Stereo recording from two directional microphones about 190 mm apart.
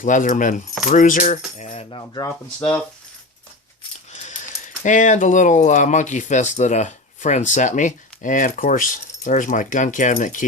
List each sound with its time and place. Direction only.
0.0 s keys jangling: 45° left (ahead or behind)
0.9 s speech: 45° left (ahead or behind)
1.7 s speech: 25° left (ahead or behind)
4.1 s coin: 35° left (ahead or behind)
4.8 s speech: 40° left (ahead or behind)